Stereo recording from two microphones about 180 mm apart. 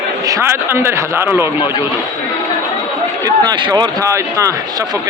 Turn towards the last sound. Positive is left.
turn(degrees=-15)  # may be behind; listen again after turning